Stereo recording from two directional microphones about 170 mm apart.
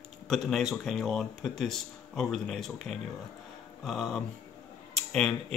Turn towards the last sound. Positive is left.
turn(degrees=5)  # may be behind; listen again after turning